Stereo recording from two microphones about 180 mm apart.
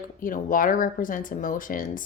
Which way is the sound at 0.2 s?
50° left (ahead or behind).